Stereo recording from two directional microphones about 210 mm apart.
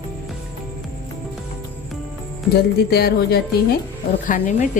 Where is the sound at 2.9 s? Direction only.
50° left (ahead or behind).